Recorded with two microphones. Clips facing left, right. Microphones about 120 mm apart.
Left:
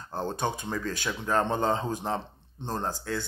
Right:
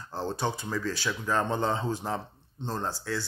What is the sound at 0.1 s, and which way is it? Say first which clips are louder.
Speech: left 1 dB; 50° left (ahead or behind).